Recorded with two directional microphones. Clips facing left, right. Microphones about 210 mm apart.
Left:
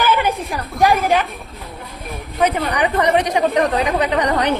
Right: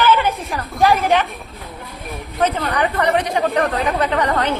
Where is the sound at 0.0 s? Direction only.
15° left (ahead or behind).